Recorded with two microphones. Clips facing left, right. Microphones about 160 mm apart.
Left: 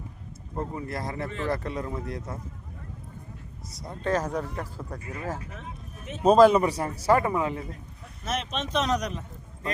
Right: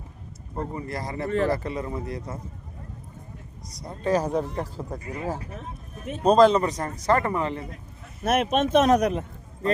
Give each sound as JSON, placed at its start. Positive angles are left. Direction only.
{"t": 0.5, "sound": "speech", "side_deg": 0}
{"t": 3.7, "sound": "speech", "side_deg": 0}
{"t": 4.1, "sound": "speech", "side_deg": -15}
{"t": 6.1, "sound": "a man's voice", "side_deg": 5}
{"t": 8.2, "sound": "speech", "side_deg": -55}